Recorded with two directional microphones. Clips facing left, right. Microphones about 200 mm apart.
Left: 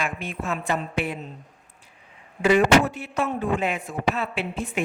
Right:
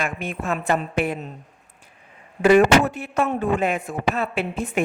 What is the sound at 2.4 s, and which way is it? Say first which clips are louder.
A woman's voice: right 3 dB; 55° right (ahead or behind).